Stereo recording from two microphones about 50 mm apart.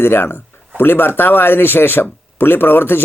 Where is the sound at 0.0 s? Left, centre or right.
Left.